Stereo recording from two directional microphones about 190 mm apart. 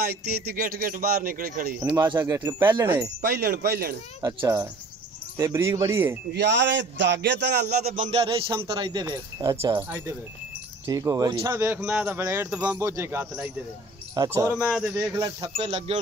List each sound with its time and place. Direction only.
0.0 s speech: 55° right (ahead or behind)
1.9 s speech: 10° right (ahead or behind)
3.2 s a man's voice: 55° right (ahead or behind)
4.2 s speech: 15° right (ahead or behind)
6.3 s a man's voice: 65° right (ahead or behind)
8.0 s speech: 30° right (ahead or behind)
14.5 s speech: 5° right (ahead or behind)
15.0 s speech: 15° right (ahead or behind)